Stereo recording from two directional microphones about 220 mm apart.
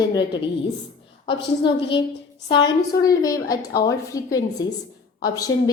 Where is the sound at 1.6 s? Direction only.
20° left (ahead or behind).